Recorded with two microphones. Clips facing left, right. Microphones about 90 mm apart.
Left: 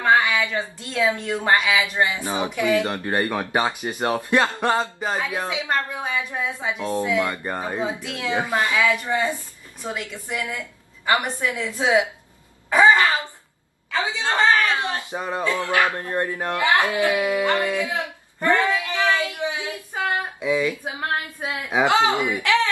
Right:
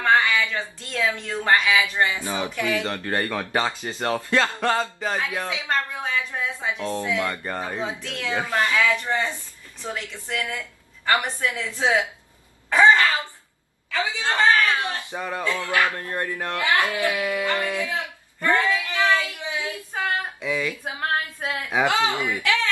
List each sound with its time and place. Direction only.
0.0 s speech: 15° left (ahead or behind)
12.6 s a sound: 15° left (ahead or behind)
13.9 s speech: 20° left (ahead or behind)
19.0 s a sound: 20° left (ahead or behind)
21.0 s female singing: 10° left (ahead or behind)
21.5 s speech: 20° left (ahead or behind)